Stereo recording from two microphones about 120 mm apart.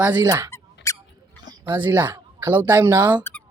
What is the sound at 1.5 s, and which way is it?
Speech, 40° right (ahead or behind).